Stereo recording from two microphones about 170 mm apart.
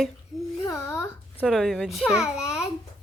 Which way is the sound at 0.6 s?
20° left (ahead or behind).